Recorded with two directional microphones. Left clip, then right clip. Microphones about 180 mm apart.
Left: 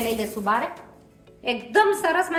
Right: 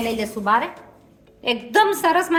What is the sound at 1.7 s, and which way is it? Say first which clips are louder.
Speech: right 2 dB; 55° right (ahead or behind).